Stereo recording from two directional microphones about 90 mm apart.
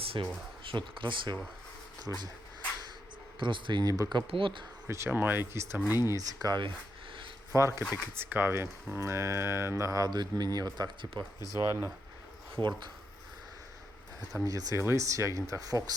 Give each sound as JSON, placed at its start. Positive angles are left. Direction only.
{"t": 0.0, "sound": "a sound", "side_deg": -90}
{"t": 0.6, "sound": "speech", "side_deg": -70}
{"t": 2.0, "sound": "speech", "side_deg": -45}
{"t": 3.4, "sound": "speech", "side_deg": -60}
{"t": 4.3, "sound": "speech", "side_deg": -70}
{"t": 4.9, "sound": "speech", "side_deg": -30}
{"t": 6.1, "sound": "speech", "side_deg": -45}
{"t": 7.5, "sound": "speech", "side_deg": -30}
{"t": 11.5, "sound": "speech", "side_deg": -30}
{"t": 14.4, "sound": "speech", "side_deg": -40}